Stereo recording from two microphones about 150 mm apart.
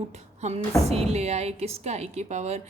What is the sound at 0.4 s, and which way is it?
A woman's voice, 50° right (ahead or behind).